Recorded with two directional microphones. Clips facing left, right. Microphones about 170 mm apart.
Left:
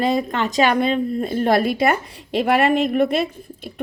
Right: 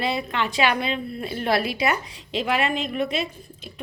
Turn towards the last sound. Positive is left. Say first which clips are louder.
# left 8 dB
turn(degrees=55)  # may be behind; listen again after turning